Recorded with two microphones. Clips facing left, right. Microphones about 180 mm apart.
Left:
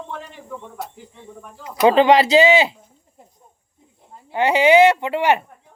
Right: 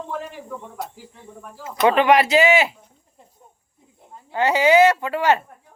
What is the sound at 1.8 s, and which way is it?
Speech, 30° left (ahead or behind).